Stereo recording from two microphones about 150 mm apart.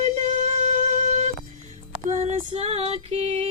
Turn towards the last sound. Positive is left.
turn(degrees=-45)  # may be behind; listen again after turning